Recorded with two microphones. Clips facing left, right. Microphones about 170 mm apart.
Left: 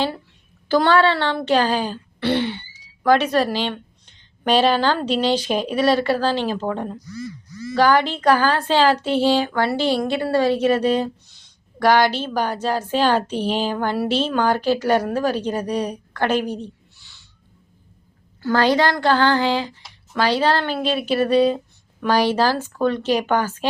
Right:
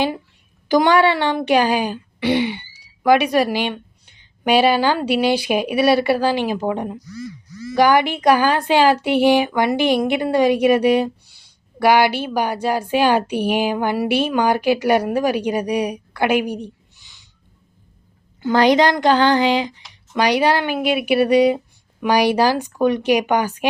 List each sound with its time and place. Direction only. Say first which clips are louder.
0.7 s a woman's voice: right 2 dB; 15° right (ahead or behind)
18.4 s a woman's voice: right 3 dB; 15° right (ahead or behind)